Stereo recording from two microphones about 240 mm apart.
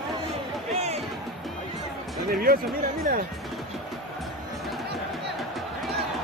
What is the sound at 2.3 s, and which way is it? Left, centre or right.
Speech, right.